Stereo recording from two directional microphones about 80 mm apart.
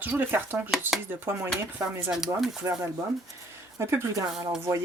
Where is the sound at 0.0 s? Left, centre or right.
Right.